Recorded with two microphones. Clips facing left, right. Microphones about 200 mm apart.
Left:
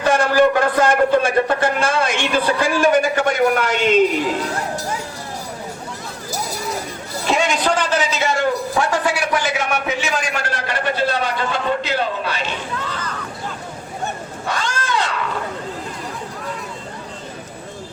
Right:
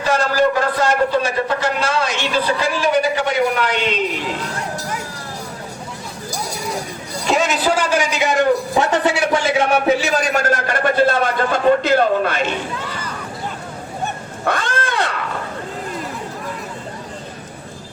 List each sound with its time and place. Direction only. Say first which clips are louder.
0.0 s a man's voice: left 2 dB; 55° left (ahead or behind)
7.3 s a man's voice: right 1 dB; centre (ahead or behind); by 12.5 s 50° right (ahead or behind)
12.8 s a sound: even; 10° right (ahead or behind)
14.4 s wild animals: right 4 dB; 55° right (ahead or behind)